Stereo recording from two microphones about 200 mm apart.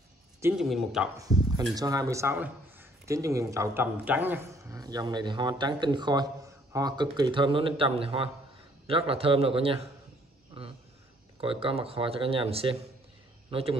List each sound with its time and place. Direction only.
0.4 s speech: 10° right (ahead or behind)
1.1 s a man's voice: 15° right (ahead or behind)
11.4 s a man's voice: 30° right (ahead or behind)